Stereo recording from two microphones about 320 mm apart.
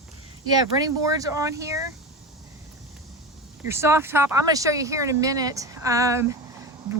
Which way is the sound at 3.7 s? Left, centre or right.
Centre.